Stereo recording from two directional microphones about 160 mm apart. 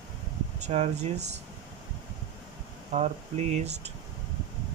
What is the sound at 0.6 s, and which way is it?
Speech, 45° right (ahead or behind).